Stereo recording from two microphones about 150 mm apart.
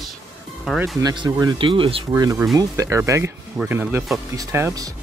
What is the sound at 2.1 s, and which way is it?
Speech, 20° right (ahead or behind).